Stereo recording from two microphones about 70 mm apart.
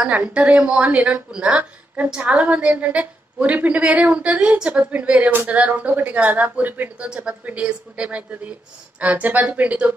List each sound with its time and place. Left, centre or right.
0.0 s a woman's voice: centre